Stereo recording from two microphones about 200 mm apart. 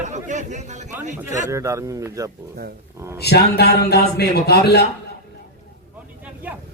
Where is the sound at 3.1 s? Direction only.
55° left (ahead or behind).